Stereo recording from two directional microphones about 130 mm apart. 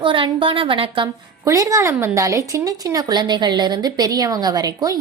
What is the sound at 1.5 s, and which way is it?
A woman's voice, 25° right (ahead or behind).